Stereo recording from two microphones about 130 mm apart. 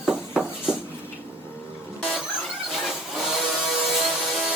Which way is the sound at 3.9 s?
Centre (ahead or behind).